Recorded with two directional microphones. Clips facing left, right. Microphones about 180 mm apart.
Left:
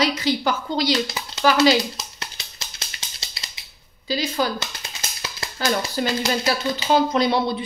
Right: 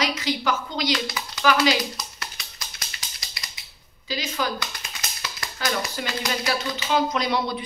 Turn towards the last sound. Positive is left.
turn(degrees=30)  # may be behind; listen again after turning